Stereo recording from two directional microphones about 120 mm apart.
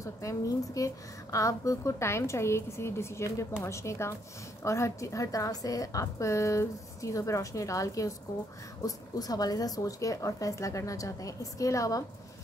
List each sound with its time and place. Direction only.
0.0 s a woman's voice: 25° left (ahead or behind)